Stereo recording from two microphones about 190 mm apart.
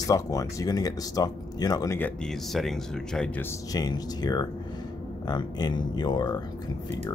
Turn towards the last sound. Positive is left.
turn(degrees=20)  # may be behind; listen again after turning